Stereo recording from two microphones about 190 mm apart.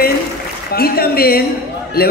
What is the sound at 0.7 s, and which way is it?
Speech, 55° left (ahead or behind).